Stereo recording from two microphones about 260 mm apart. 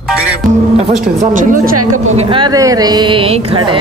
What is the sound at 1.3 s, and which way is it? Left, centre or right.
Speech, right.